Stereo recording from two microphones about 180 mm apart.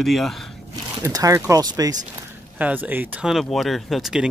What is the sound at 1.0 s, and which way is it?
Speech, 20° right (ahead or behind).